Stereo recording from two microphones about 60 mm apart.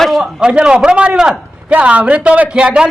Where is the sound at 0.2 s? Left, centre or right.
Centre.